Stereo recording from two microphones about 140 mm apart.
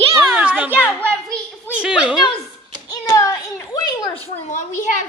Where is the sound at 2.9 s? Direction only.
25° left (ahead or behind).